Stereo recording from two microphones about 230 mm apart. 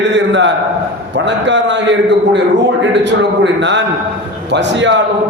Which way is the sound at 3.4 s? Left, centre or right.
Right.